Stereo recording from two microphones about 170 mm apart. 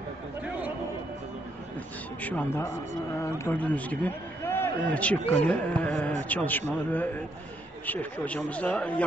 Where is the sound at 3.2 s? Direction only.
15° left (ahead or behind).